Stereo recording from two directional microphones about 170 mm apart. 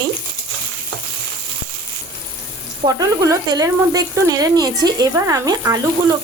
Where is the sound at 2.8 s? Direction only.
20° right (ahead or behind).